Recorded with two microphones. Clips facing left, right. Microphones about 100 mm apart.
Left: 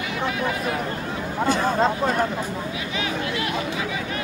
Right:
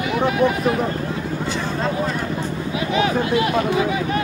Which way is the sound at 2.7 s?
40° right (ahead or behind).